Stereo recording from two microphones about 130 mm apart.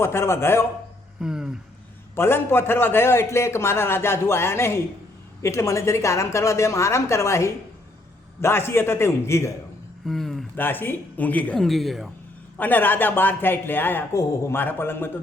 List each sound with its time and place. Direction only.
0.0 s a man's voice: 20° left (ahead or behind)
1.2 s speech: 5° right (ahead or behind)
2.1 s a man's voice: 20° left (ahead or behind)
10.1 s speech: centre (ahead or behind)
10.5 s speech: 15° left (ahead or behind); by 12.1 s centre (ahead or behind)
12.5 s speech: 15° left (ahead or behind)